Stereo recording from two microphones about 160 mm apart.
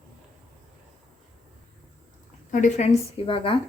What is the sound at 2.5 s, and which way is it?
Speech, 50° left (ahead or behind).